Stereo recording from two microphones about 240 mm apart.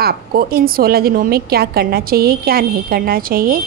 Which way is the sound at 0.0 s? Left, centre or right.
Right.